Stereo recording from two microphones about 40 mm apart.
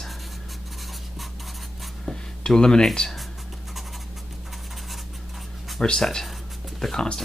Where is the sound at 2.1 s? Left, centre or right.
Centre.